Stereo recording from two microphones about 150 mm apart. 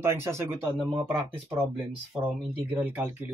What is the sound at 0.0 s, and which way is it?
Speech, 15° right (ahead or behind).